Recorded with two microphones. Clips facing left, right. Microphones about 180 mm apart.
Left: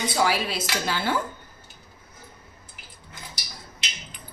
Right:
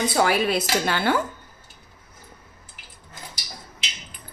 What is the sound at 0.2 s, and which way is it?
Speech, 55° right (ahead or behind).